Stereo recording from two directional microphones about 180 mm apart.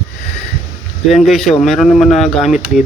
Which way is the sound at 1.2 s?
Centre (ahead or behind).